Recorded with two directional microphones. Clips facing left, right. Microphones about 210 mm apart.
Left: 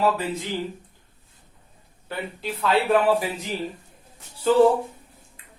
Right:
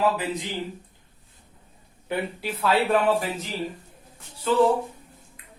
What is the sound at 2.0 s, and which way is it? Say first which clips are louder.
Speech: right 2 dB; 10° right (ahead or behind).